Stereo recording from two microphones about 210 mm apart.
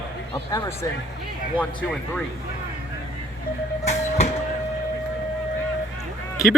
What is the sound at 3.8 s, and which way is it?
Train, 30° left (ahead or behind).